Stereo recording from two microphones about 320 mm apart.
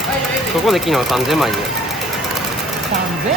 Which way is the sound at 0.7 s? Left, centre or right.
Centre.